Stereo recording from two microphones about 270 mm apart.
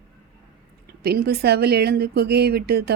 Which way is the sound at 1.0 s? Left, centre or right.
Right.